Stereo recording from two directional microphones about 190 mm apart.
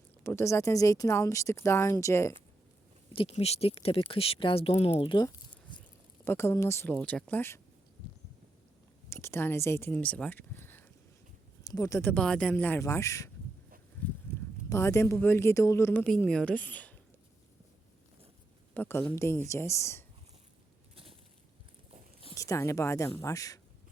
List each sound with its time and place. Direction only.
0.2 s speech: 15° left (ahead or behind)
3.1 s speech: 30° left (ahead or behind)
6.2 s speech: 15° left (ahead or behind)
9.0 s speech: 15° left (ahead or behind)
14.7 s speech: 15° left (ahead or behind)
18.7 s speech: 10° left (ahead or behind)
20.9 s a sound: 30° right (ahead or behind)
22.4 s speech: 15° left (ahead or behind)